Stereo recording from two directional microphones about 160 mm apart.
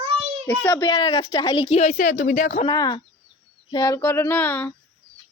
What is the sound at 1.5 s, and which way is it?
A woman's voice, 40° left (ahead or behind).